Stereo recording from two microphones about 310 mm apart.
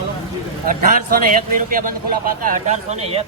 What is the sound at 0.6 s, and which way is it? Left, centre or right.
A man's voice, right.